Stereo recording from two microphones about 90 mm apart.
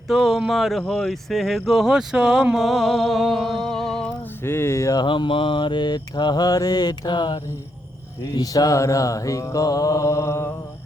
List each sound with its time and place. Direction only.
0.1 s speech: centre (ahead or behind)
4.4 s mantra: 30° left (ahead or behind)
4.9 s mantra: 65° left (ahead or behind)
8.4 s mantra: 45° left (ahead or behind)